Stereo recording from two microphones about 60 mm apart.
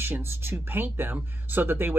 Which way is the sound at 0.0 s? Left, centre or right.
Right.